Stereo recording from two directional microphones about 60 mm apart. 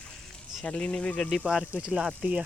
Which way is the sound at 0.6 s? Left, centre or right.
Centre.